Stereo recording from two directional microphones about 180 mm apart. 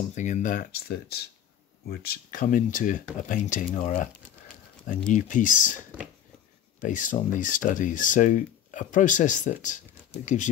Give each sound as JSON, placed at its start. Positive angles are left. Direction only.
{"t": 0.1, "sound": "speech", "side_deg": 45}
{"t": 5.1, "sound": "speech", "side_deg": 45}
{"t": 6.8, "sound": "speech", "side_deg": 45}